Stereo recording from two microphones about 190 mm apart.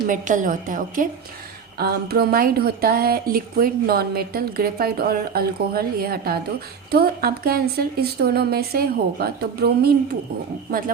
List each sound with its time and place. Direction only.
0.1 s speech: 45° right (ahead or behind)